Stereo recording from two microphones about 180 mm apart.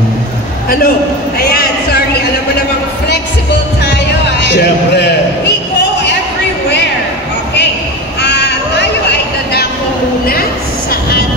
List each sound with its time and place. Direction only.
0.7 s a man's voice: 55° left (ahead or behind)
1.5 s a sound: 60° left (ahead or behind)
3.8 s music: 70° left (ahead or behind)
8.2 s crow: 70° left (ahead or behind)
10.9 s vehicle: 60° left (ahead or behind)